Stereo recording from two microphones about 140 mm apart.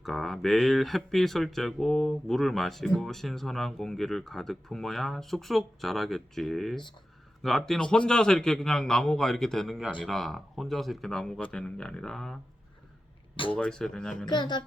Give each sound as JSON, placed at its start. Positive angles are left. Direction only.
{"t": 0.0, "sound": "speech", "side_deg": 0}
{"t": 13.3, "sound": "speech", "side_deg": 40}
{"t": 13.6, "sound": "speech", "side_deg": 5}
{"t": 14.3, "sound": "speech", "side_deg": 30}